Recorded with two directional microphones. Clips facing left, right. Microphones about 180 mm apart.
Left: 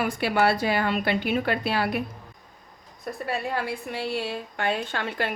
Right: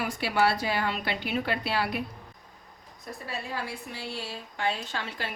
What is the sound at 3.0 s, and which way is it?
A woman's voice, 60° left (ahead or behind).